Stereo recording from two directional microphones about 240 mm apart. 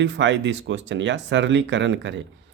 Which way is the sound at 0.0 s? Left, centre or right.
Right.